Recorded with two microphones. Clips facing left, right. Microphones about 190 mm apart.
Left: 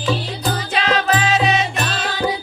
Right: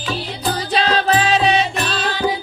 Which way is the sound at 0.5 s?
35° right (ahead or behind).